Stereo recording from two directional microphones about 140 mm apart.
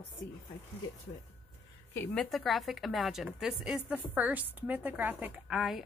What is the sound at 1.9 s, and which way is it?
Speech, 15° left (ahead or behind).